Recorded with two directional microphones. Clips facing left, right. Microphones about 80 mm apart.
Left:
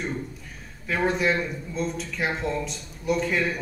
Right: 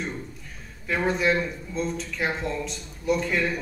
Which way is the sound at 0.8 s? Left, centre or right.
Centre.